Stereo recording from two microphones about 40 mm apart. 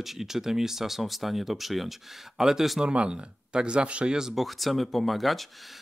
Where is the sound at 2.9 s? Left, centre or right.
Right.